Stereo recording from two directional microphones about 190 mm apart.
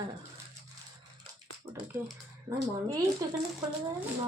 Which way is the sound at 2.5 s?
20° right (ahead or behind).